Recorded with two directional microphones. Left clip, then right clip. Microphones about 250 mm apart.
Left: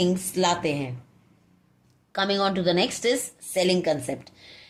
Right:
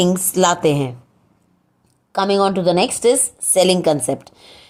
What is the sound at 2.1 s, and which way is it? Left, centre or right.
A woman's voice, right.